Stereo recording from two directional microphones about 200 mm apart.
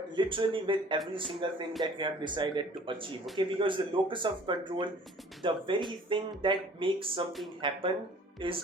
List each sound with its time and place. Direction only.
0.2 s speech: 25° right (ahead or behind)